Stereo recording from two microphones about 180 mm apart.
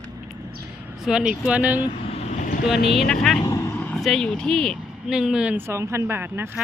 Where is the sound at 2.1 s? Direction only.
45° left (ahead or behind).